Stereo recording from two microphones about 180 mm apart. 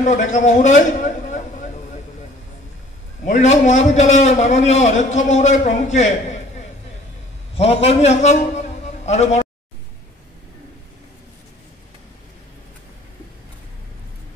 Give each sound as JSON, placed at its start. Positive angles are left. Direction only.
{"t": 0.0, "sound": "a man's voice", "side_deg": 45}
{"t": 3.3, "sound": "a man's voice", "side_deg": 40}
{"t": 7.5, "sound": "a man's voice", "side_deg": 35}